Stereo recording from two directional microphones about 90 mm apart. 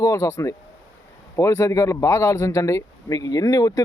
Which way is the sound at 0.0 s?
35° left (ahead or behind).